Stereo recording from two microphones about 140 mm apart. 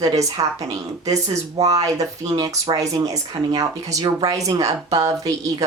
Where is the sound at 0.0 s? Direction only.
25° right (ahead or behind).